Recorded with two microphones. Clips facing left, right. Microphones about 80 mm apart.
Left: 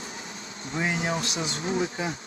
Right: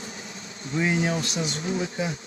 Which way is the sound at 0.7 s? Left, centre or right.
Left.